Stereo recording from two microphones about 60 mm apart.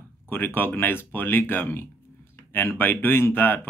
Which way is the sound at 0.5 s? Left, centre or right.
Left.